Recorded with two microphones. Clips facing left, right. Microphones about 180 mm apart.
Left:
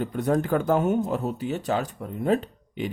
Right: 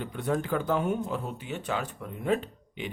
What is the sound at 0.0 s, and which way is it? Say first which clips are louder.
Speech: left 6 dB; 40° left (ahead or behind).